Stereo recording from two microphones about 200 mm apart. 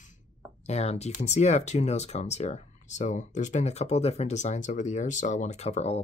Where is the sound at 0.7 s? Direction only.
35° left (ahead or behind).